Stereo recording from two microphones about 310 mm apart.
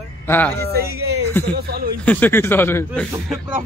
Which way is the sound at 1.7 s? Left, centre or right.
Right.